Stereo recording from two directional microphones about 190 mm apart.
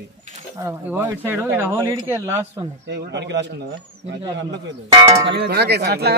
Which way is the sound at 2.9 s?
65° right (ahead or behind).